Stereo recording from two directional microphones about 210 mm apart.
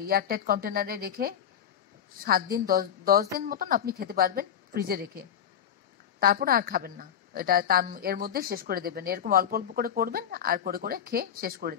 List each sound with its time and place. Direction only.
0.0 s a woman's voice: 45° right (ahead or behind)